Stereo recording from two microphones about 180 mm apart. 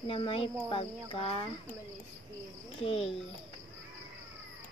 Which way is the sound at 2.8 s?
30° left (ahead or behind).